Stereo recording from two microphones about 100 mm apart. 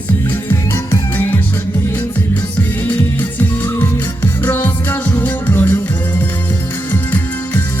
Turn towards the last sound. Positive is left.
turn(degrees=20)  # may be behind; listen again after turning